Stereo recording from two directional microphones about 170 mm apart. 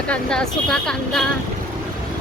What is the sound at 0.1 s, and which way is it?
Speech, 5° left (ahead or behind).